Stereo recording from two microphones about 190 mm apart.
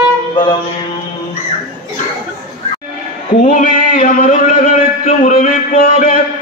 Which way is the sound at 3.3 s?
45° left (ahead or behind).